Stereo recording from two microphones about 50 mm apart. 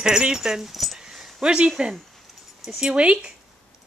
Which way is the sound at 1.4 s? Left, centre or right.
Centre.